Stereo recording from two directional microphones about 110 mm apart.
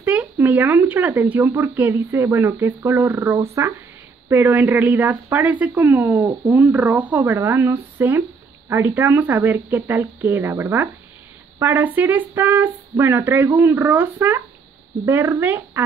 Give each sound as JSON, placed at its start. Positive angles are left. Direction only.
{"t": 0.0, "sound": "speech", "side_deg": -15}